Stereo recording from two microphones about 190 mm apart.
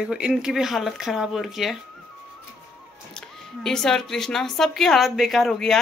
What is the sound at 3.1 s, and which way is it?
A woman's voice, 5° left (ahead or behind).